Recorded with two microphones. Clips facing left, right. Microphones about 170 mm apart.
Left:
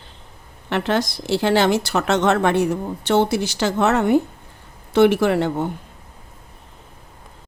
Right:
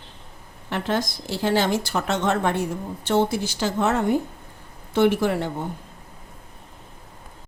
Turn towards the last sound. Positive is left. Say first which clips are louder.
# left 5 dB
turn(degrees=75)  # may be behind; listen again after turning